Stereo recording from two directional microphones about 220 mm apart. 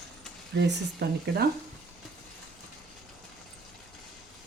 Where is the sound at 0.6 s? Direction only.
50° right (ahead or behind).